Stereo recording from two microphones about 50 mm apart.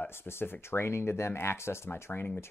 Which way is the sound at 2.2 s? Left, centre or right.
Left.